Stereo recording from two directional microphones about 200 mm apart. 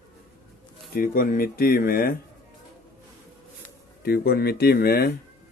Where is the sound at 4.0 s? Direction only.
50° left (ahead or behind).